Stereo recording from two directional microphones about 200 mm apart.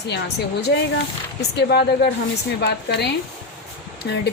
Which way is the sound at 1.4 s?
55° left (ahead or behind).